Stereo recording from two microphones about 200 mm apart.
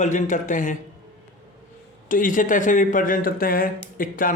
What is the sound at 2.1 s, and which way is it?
A man's voice, 40° left (ahead or behind).